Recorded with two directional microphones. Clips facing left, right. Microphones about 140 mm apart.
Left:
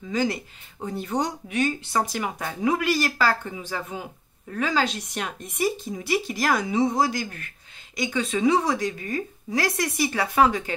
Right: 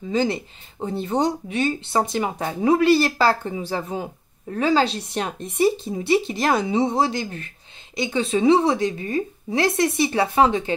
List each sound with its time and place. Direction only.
0.1 s speech: 25° right (ahead or behind)